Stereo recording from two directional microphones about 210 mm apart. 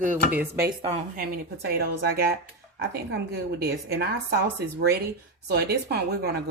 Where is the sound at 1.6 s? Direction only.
50° right (ahead or behind).